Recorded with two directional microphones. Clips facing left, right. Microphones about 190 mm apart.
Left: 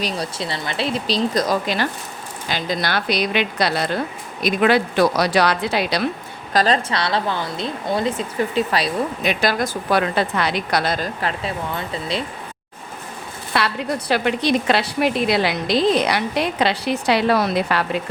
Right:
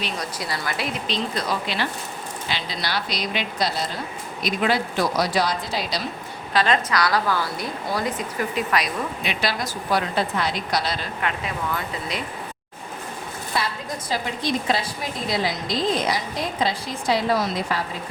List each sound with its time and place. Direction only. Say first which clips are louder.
0.0 s a woman's voice: left 4 dB; 30° left (ahead or behind); by 6.1 s 60° left (ahead or behind)
6.5 s a woman's voice: left 3 dB; 40° left (ahead or behind)
6.9 s speech: even; 25° left (ahead or behind)
9.2 s speech: left 7 dB; 50° left (ahead or behind); by 12.2 s 30° left (ahead or behind)
13.5 s a woman's voice: left 6 dB; 70° left (ahead or behind)